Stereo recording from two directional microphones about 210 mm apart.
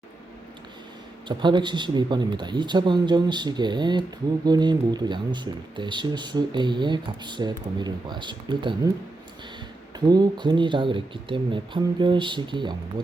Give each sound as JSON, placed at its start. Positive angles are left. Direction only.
{"t": 1.3, "sound": "speech", "side_deg": -20}
{"t": 10.1, "sound": "speech", "side_deg": -20}